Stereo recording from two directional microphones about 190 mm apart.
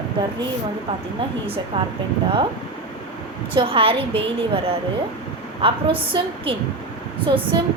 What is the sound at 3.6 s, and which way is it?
Speech, 30° right (ahead or behind).